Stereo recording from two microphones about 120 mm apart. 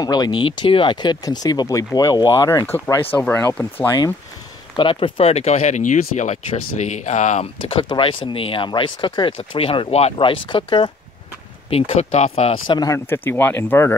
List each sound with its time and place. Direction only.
0.0 s speech: 35° left (ahead or behind); by 3.3 s 15° left (ahead or behind)
4.7 s speech: 45° left (ahead or behind); by 7.4 s 85° left
7.6 s speech: 45° left (ahead or behind)
11.7 s speech: 60° left (ahead or behind)
12.6 s speech: 40° left (ahead or behind)
12.9 s speech: 20° left (ahead or behind)